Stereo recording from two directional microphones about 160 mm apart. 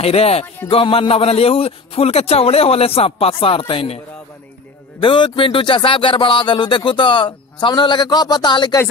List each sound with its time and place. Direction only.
0.0 s a man's voice: 40° left (ahead or behind)
5.0 s speech: 30° left (ahead or behind)